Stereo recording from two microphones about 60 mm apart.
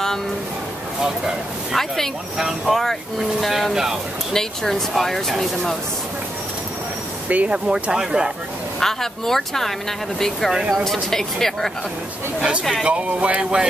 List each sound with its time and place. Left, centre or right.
1.0 s speech: centre
4.3 s speech: centre
7.2 s speech: right
8.7 s speech: centre
12.8 s speech: right